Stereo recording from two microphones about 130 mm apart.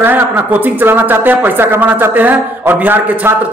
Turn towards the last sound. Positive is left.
turn(degrees=-10)  # may be behind; listen again after turning